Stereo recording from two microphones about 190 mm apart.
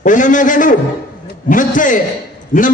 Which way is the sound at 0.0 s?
40° left (ahead or behind).